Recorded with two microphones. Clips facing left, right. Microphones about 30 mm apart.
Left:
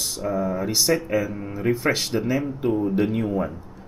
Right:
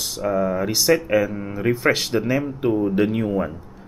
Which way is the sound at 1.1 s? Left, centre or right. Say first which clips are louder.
Right 4 dB; centre.